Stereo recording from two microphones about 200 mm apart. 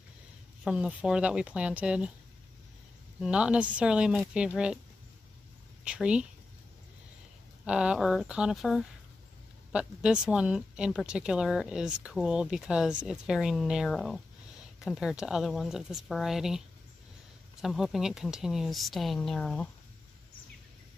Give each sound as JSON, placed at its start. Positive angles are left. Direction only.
{"t": 0.7, "sound": "speech", "side_deg": -5}
{"t": 3.2, "sound": "speech", "side_deg": -5}
{"t": 5.9, "sound": "speech", "side_deg": -5}
{"t": 7.6, "sound": "speech", "side_deg": -5}